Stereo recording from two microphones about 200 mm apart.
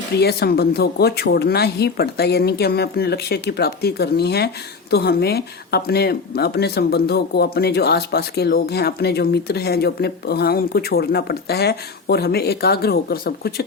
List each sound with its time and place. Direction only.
0.2 s speech: 55° left (ahead or behind)